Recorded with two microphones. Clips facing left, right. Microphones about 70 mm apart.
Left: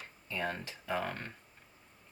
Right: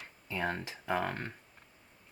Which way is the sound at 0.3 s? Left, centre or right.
Right.